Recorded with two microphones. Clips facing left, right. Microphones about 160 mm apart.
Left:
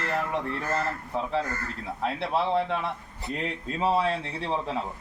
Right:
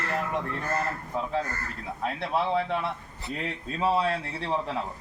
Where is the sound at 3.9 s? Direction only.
20° left (ahead or behind).